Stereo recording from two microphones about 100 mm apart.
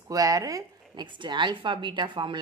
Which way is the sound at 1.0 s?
50° right (ahead or behind).